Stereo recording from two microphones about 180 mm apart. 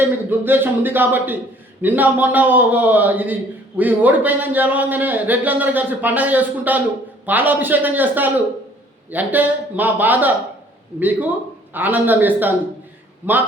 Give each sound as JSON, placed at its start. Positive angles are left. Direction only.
{"t": 0.0, "sound": "a man's voice", "side_deg": -10}
{"t": 11.7, "sound": "a man's voice", "side_deg": -10}